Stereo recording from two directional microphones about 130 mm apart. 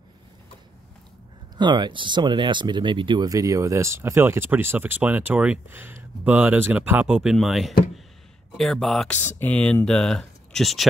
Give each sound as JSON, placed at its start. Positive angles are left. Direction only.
{"t": 1.6, "sound": "speech", "side_deg": -35}
{"t": 3.3, "sound": "speech", "side_deg": -25}
{"t": 9.1, "sound": "speech", "side_deg": 15}